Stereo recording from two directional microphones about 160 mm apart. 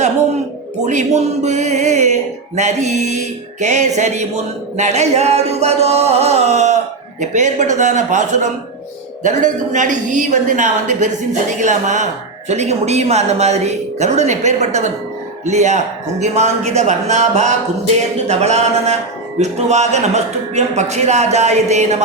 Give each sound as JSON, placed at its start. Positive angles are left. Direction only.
{"t": 0.8, "sound": "speech", "side_deg": -45}